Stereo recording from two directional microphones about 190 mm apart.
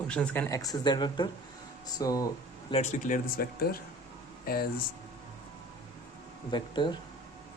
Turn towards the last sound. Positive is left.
turn(degrees=25)  # may be behind; listen again after turning